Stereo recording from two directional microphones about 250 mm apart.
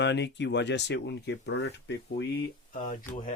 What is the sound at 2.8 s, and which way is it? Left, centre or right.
Speech, centre.